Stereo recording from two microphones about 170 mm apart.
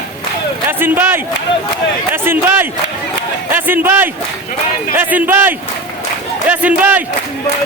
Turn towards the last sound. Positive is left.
turn(degrees=-10)  # may be behind; listen again after turning